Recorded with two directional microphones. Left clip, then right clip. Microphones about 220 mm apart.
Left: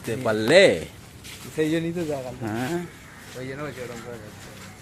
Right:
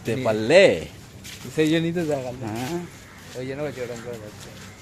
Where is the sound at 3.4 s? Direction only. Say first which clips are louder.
Right 4 dB; 25° right (ahead or behind).